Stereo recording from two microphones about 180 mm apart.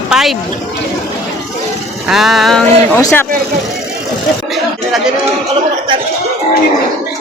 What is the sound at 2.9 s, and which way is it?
Speech, 10° left (ahead or behind).